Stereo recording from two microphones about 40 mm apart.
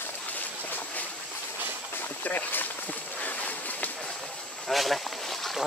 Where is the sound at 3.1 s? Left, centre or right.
Left.